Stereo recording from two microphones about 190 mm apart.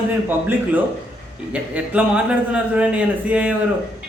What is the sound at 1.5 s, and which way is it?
A man's voice, 5° right (ahead or behind).